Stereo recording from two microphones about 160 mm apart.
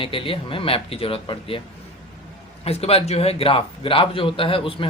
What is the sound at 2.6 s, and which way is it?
A man's voice, 40° left (ahead or behind).